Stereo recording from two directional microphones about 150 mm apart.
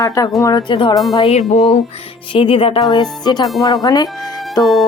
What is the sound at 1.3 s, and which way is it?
A woman's voice, 50° left (ahead or behind).